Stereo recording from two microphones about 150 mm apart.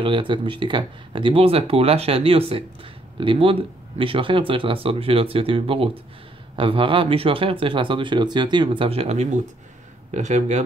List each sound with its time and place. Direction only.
0.0 s speech: 30° right (ahead or behind); by 10.6 s 50° right (ahead or behind)